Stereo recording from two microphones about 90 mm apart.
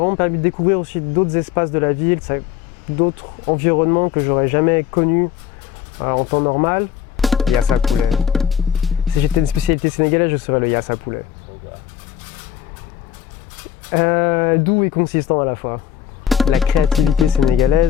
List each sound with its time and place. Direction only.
0.0 s speech: 15° left (ahead or behind)
7.2 s music: centre (ahead or behind)
9.8 s speech: 15° left (ahead or behind)
13.9 s speech: 15° left (ahead or behind)
16.2 s music: centre (ahead or behind)